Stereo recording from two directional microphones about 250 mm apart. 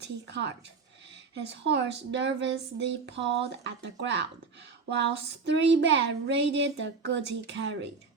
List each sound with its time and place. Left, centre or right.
0.0 s speech: right
1.6 s speech: right
5.5 s speech: right